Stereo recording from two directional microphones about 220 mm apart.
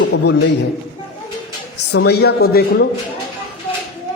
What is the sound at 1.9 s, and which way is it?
Speech, 50° left (ahead or behind).